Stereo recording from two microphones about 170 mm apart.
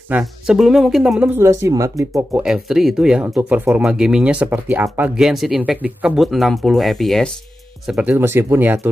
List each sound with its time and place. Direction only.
0.1 s speech: 5° right (ahead or behind); by 2.2 s 20° right (ahead or behind)
2.3 s speech: 5° right (ahead or behind)